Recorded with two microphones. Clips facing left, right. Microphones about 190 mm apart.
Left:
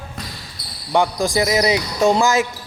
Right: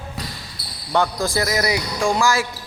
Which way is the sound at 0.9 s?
15° left (ahead or behind).